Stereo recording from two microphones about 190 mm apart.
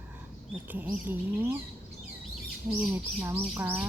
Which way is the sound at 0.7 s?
10° right (ahead or behind).